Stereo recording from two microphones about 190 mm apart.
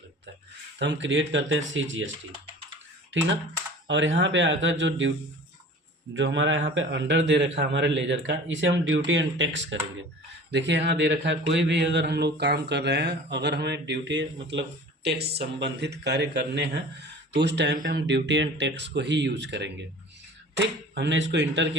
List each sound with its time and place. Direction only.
0.8 s speech: 70° right (ahead or behind); by 2.0 s 85° right
3.8 s a man's voice: 75° right (ahead or behind)
6.1 s a man's voice: 75° right (ahead or behind)
10.5 s a man's voice: 65° right (ahead or behind)